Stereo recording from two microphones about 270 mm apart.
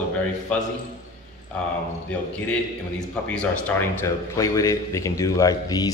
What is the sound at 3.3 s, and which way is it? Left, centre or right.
A man's voice, centre.